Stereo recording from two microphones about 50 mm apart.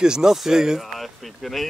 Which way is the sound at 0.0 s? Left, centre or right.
Centre.